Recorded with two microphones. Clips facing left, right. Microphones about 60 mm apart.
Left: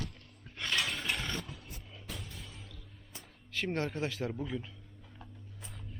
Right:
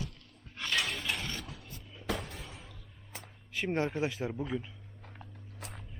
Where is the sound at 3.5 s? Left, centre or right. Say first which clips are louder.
Right 3 dB; centre.